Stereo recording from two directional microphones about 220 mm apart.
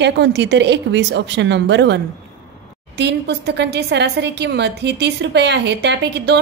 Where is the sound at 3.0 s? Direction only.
50° right (ahead or behind).